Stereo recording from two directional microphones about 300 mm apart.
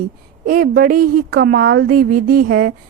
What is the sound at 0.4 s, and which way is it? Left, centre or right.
A woman's voice, right.